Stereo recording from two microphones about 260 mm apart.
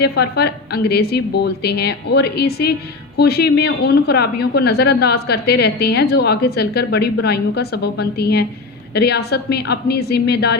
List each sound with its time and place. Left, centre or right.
0.0 s a woman's voice: left